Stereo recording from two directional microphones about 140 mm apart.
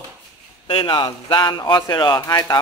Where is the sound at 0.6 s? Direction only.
35° left (ahead or behind).